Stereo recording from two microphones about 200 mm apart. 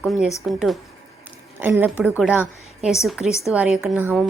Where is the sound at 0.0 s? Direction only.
Centre (ahead or behind).